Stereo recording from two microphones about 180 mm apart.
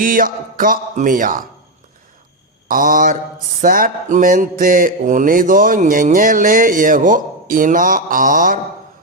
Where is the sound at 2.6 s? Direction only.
50° right (ahead or behind).